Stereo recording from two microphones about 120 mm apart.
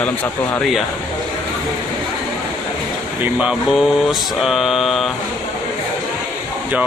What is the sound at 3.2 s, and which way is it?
Mantra, 10° right (ahead or behind).